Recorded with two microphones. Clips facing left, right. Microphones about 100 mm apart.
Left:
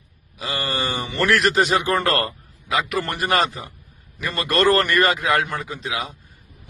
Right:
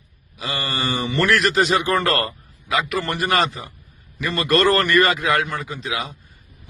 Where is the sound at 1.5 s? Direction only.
10° left (ahead or behind).